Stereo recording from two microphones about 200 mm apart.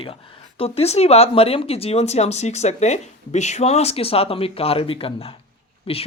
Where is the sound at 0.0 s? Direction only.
30° left (ahead or behind).